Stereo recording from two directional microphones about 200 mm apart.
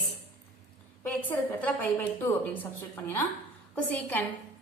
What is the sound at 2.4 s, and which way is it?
A woman's voice, 10° left (ahead or behind).